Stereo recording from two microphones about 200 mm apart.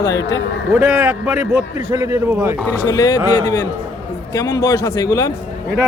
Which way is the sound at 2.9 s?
20° left (ahead or behind).